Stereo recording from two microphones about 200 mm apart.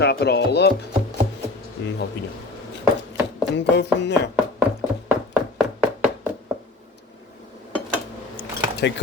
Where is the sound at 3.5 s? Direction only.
60° left (ahead or behind).